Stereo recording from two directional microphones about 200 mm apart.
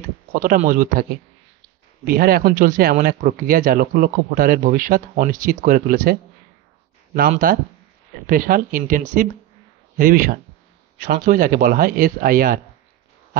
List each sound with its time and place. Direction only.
0.3 s speech: 40° right (ahead or behind)
2.0 s speech: 50° right (ahead or behind)
7.2 s speech: 45° right (ahead or behind)